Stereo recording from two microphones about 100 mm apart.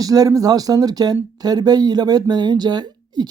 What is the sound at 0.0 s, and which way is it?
Speech, 35° right (ahead or behind).